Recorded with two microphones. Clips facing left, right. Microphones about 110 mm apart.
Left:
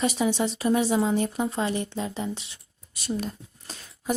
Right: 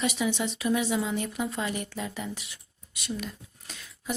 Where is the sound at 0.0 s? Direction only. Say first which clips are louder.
Left 4 dB; 35° left (ahead or behind).